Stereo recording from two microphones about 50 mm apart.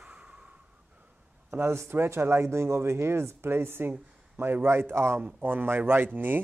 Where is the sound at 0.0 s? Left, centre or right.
Right.